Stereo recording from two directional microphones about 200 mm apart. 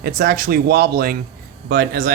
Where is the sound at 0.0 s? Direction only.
50° right (ahead or behind).